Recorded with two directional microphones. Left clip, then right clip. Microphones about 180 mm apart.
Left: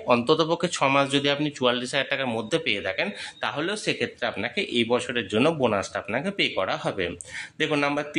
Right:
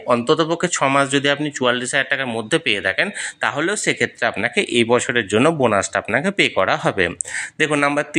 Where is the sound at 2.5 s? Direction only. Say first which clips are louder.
Right 9 dB; 25° right (ahead or behind).